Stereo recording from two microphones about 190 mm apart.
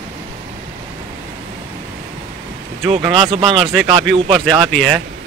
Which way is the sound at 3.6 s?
Centre (ahead or behind).